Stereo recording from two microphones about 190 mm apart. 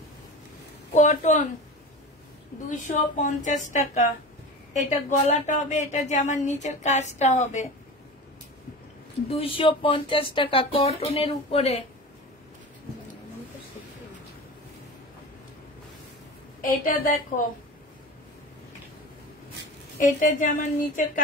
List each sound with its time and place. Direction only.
0.9 s a woman's voice: 40° left (ahead or behind)
2.7 s speech: 40° left (ahead or behind)
9.3 s speech: 30° left (ahead or behind)
16.6 s a woman's voice: 45° left (ahead or behind)
20.0 s a woman's voice: 40° left (ahead or behind)